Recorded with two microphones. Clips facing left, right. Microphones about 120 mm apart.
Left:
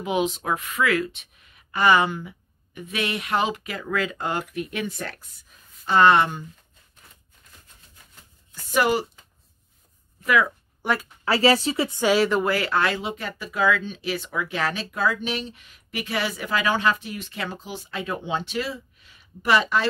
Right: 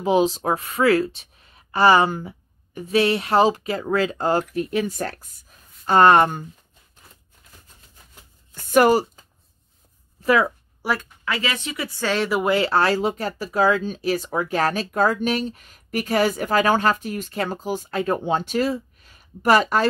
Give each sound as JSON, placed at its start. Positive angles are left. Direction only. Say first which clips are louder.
{"t": 0.0, "sound": "speech", "louder": "right 6 dB", "side_deg": -35}
{"t": 8.7, "sound": "speech", "louder": "right 6 dB", "side_deg": -40}
{"t": 10.2, "sound": "speech", "louder": "right 3 dB", "side_deg": -35}
{"t": 10.8, "sound": "speech", "louder": "even", "side_deg": -5}
{"t": 11.2, "sound": "speech", "louder": "left 7 dB", "side_deg": 35}
{"t": 12.0, "sound": "speech", "louder": "left 3 dB", "side_deg": 10}
{"t": 12.4, "sound": "speech", "louder": "right 4 dB", "side_deg": -25}